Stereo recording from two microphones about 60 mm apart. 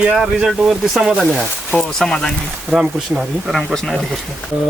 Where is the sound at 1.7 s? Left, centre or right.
Centre.